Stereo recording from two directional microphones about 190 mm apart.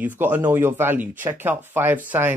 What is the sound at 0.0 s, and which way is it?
Speech, 10° right (ahead or behind).